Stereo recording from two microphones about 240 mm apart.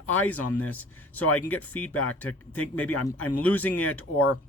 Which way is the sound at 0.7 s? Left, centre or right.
Centre.